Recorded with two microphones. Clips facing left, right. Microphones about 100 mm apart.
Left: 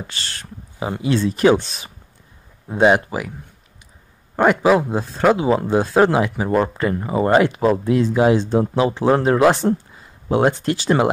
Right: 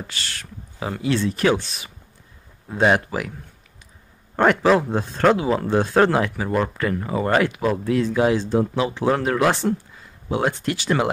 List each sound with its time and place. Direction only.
0.1 s speech: 30° left (ahead or behind)
0.7 s speech: 20° left (ahead or behind)
2.7 s speech: 15° left (ahead or behind)
4.4 s speech: 10° left (ahead or behind)
5.4 s speech: 20° left (ahead or behind)